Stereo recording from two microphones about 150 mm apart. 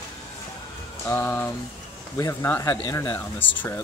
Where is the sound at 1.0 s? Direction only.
15° left (ahead or behind).